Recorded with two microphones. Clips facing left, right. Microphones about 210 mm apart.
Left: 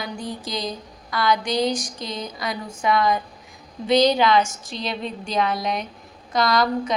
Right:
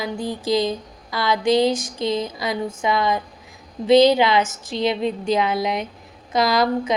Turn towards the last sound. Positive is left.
turn(degrees=-25)  # may be behind; listen again after turning